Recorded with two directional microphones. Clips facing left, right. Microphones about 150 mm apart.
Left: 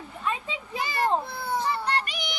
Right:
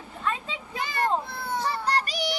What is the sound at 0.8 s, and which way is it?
Speech, 5° left (ahead or behind).